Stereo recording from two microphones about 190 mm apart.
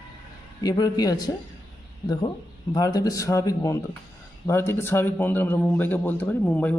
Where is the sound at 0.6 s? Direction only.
20° left (ahead or behind).